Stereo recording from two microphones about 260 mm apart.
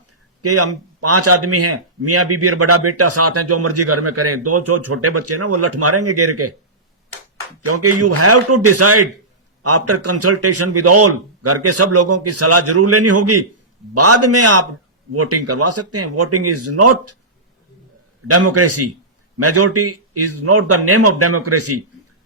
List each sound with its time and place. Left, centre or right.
0.4 s a man's voice: right
7.7 s a man's voice: right
18.3 s a man's voice: right